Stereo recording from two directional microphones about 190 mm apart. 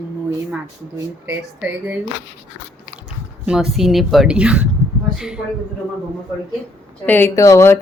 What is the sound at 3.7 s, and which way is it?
Speech, centre (ahead or behind).